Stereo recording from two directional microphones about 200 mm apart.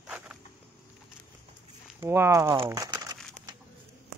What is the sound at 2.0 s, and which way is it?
Speech, 10° right (ahead or behind).